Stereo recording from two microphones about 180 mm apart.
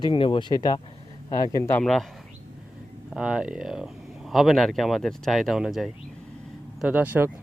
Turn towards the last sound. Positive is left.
turn(degrees=-10)  # may be behind; listen again after turning